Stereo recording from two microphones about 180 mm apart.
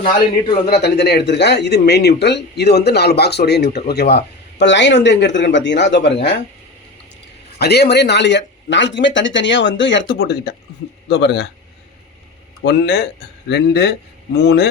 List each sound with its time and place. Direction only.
0.0 s a man's voice: 30° left (ahead or behind)
0.8 s a man's voice: 65° left (ahead or behind)
7.6 s a man's voice: 65° left (ahead or behind)
12.6 s a man's voice: 65° left (ahead or behind)